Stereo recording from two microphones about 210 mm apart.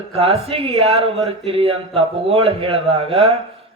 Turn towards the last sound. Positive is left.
turn(degrees=-25)  # may be behind; listen again after turning